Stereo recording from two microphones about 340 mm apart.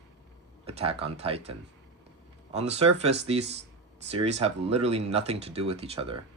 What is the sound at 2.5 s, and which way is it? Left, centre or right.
Speech, centre.